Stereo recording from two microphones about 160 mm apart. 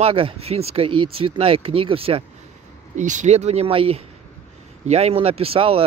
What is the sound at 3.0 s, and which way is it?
Speech, 50° right (ahead or behind).